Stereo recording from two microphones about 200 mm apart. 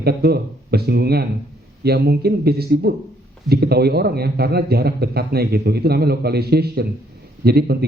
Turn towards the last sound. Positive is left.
turn(degrees=-50)  # may be behind; listen again after turning